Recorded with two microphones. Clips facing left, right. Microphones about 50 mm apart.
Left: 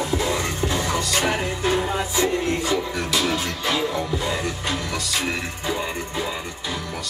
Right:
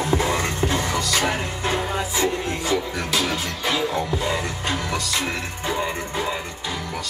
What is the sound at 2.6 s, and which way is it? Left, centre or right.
Music, right.